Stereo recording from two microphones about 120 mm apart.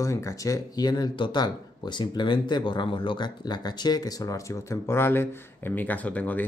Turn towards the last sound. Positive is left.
turn(degrees=10)  # may be behind; listen again after turning